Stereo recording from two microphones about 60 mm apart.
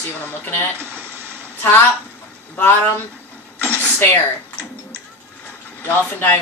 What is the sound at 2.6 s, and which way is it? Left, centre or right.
Speech, left.